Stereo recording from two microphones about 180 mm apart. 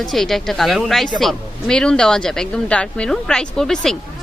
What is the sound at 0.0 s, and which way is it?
Speech, centre (ahead or behind).